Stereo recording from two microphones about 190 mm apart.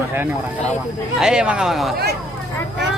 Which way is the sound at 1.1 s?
5° right (ahead or behind).